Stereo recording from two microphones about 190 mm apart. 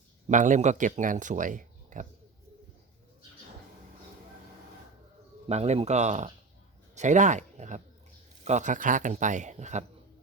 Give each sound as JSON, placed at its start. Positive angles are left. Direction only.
{"t": 0.3, "sound": "speech", "side_deg": -40}
{"t": 5.5, "sound": "speech", "side_deg": -35}